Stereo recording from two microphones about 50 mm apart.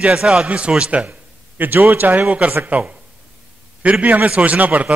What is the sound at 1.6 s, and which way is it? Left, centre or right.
Speech, right.